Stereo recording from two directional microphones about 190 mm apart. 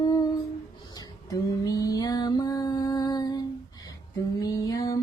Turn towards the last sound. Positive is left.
turn(degrees=20)  # may be behind; listen again after turning